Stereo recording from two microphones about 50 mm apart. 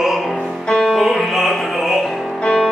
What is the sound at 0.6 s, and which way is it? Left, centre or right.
Music, centre.